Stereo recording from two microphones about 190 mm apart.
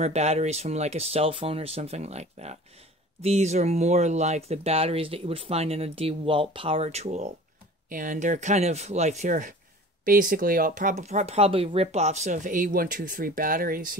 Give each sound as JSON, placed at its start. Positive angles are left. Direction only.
{"t": 0.0, "sound": "speech", "side_deg": -35}